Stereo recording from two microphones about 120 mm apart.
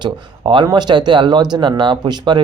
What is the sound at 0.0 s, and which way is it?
Speech, 40° right (ahead or behind).